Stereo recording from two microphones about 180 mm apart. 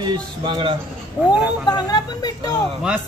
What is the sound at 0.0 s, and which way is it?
Speech, 25° right (ahead or behind).